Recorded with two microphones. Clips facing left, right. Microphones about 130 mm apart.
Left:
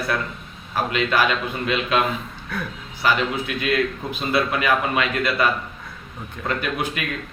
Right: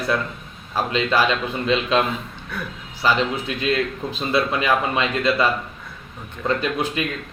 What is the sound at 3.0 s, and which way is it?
A man's voice, 30° right (ahead or behind).